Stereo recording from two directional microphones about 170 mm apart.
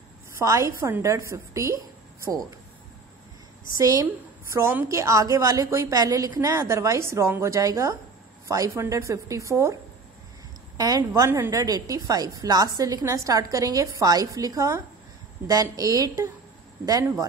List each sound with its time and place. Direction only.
0.4 s a woman's voice: 20° right (ahead or behind)
3.7 s a woman's voice: 20° right (ahead or behind)
10.8 s a woman's voice: 20° right (ahead or behind)